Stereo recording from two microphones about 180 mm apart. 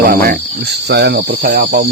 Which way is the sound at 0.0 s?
55° right (ahead or behind).